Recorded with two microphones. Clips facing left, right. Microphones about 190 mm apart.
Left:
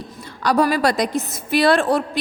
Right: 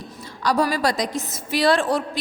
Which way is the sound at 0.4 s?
60° left (ahead or behind).